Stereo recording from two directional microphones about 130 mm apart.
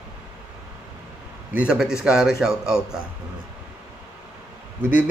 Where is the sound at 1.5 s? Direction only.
5° right (ahead or behind).